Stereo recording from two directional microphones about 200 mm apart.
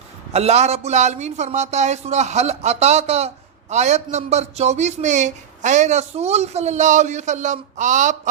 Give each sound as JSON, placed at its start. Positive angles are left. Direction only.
{"t": 0.3, "sound": "speech", "side_deg": -35}